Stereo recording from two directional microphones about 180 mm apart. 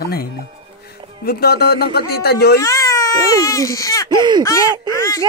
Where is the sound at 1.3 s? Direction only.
60° left (ahead or behind).